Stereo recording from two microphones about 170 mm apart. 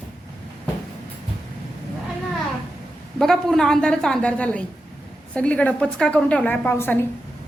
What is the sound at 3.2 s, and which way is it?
A woman's voice, centre (ahead or behind).